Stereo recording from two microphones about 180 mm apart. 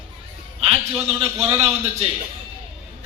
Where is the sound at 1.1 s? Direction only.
35° right (ahead or behind).